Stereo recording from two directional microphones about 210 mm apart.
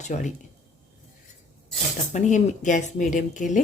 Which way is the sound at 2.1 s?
35° left (ahead or behind).